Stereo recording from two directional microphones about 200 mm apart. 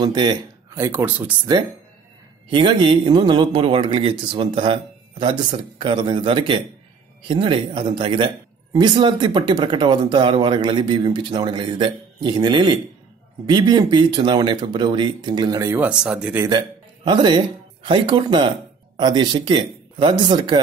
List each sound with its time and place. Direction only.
0.0 s speech: 20° right (ahead or behind)
2.5 s speech: 25° right (ahead or behind); by 16.4 s 5° right (ahead or behind)
16.4 s a man's voice: 25° right (ahead or behind)